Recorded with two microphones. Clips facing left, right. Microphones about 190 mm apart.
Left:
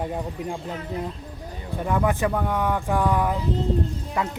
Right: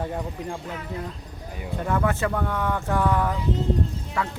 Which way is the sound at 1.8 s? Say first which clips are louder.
Left 2 dB; 15° left (ahead or behind).